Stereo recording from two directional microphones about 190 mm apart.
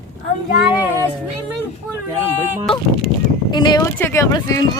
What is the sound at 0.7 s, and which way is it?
Child singing, 10° right (ahead or behind).